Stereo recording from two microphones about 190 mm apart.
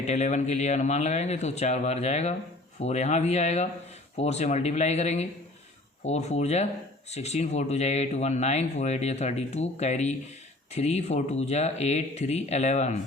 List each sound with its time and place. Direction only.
0.0 s speech: 40° left (ahead or behind)